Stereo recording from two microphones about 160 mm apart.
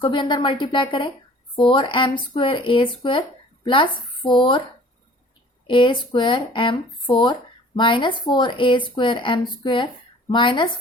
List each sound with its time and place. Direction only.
0.0 s speech: 30° left (ahead or behind)
5.6 s a woman's voice: 30° left (ahead or behind)